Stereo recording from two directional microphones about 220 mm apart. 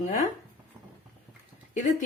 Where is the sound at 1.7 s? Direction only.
35° left (ahead or behind).